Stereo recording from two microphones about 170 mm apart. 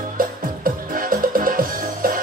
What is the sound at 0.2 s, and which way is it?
Music, 55° right (ahead or behind).